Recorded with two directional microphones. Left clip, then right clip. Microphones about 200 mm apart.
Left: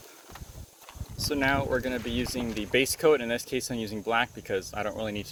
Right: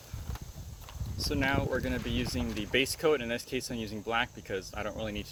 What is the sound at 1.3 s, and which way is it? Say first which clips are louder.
Speech: left 4 dB; 20° left (ahead or behind).